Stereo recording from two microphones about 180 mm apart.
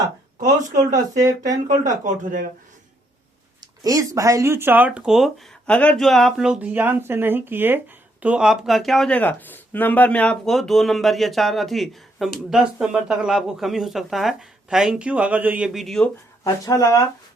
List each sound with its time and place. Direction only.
0.8 s speech: 20° right (ahead or behind)
3.8 s speech: 20° right (ahead or behind); by 16.0 s centre (ahead or behind)
16.4 s speech: 15° left (ahead or behind)